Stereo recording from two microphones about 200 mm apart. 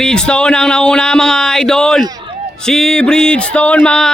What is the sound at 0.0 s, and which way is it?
A man's voice, 5° left (ahead or behind).